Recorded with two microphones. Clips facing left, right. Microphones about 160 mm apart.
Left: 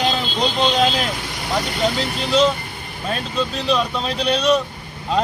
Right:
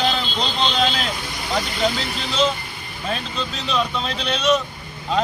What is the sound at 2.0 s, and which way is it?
Speech, 45° left (ahead or behind).